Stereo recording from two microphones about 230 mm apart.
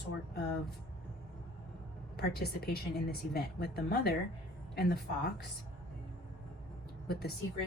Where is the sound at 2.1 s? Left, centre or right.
Left.